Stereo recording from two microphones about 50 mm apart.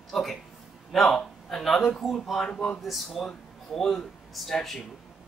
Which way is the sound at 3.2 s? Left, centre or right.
Centre.